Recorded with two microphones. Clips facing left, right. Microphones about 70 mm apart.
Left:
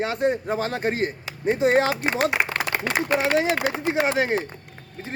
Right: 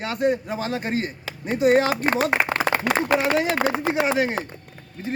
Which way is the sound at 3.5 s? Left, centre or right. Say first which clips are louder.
Right 1 dB; right.